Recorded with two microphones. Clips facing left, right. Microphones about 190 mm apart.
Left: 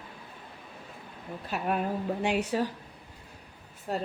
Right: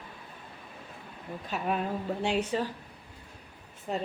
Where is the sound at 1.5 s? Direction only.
5° left (ahead or behind).